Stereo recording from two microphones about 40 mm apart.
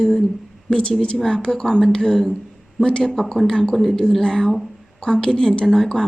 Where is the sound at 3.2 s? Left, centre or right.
Centre.